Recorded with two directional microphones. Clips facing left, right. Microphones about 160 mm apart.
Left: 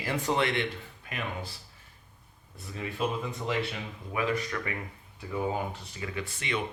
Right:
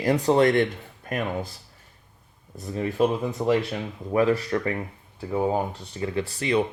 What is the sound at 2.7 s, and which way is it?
Speech, 40° right (ahead or behind).